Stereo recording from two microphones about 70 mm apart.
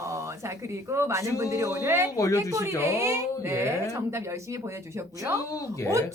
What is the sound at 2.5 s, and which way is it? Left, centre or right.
Speech, right.